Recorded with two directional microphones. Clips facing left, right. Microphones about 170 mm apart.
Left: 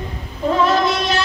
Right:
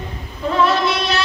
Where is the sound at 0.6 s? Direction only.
45° left (ahead or behind).